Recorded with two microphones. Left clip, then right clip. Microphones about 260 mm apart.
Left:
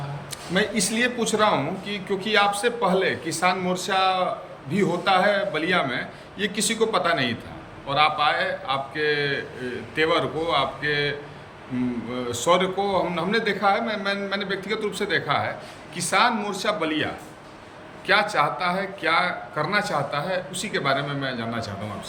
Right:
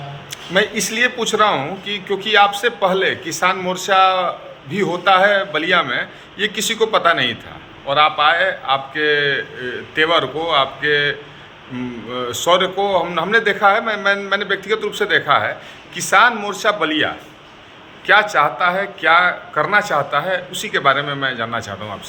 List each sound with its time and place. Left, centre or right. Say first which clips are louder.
0.5 s a man's voice: right 6 dB; centre
12.1 s a man's voice: right 6 dB; centre